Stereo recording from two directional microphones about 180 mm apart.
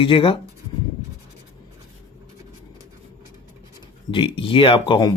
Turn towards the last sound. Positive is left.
turn(degrees=25)  # may be behind; listen again after turning